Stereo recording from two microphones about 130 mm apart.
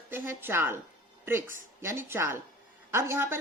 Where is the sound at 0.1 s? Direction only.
15° right (ahead or behind).